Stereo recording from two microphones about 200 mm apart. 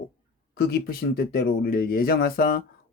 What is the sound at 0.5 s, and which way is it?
Speech, 50° left (ahead or behind).